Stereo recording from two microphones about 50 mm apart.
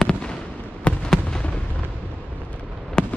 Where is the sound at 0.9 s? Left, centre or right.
Left.